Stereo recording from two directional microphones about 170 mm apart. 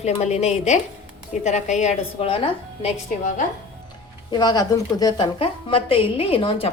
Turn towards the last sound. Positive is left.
turn(degrees=30)  # may be behind; listen again after turning